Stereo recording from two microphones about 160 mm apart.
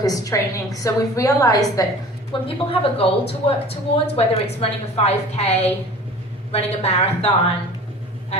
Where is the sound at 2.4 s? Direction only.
35° left (ahead or behind).